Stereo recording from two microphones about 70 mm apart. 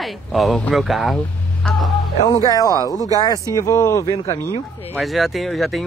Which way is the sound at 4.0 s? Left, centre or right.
Left.